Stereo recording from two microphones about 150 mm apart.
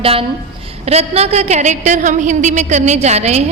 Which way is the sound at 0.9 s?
45° right (ahead or behind).